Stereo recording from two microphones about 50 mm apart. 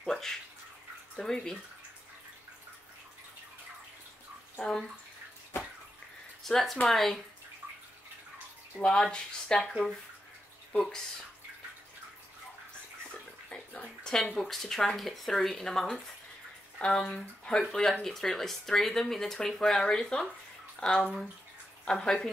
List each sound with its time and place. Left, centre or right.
0.0 s bathtub: centre
1.1 s speech: centre
4.6 s speech: centre
6.4 s speech: centre
8.8 s speech: centre
13.5 s bathtub: centre
14.1 s speech: centre
17.6 s speech: centre